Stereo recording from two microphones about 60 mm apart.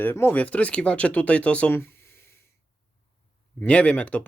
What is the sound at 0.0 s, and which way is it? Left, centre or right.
Speech, left.